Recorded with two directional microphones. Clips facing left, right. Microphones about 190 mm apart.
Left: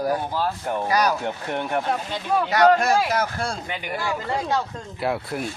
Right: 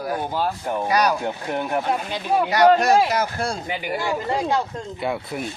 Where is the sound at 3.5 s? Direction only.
10° right (ahead or behind).